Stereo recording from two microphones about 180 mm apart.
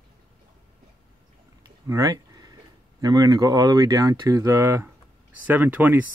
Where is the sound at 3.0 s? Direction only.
20° right (ahead or behind).